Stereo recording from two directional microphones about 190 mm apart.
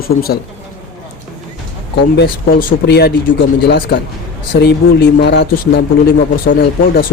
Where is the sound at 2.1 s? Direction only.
50° left (ahead or behind).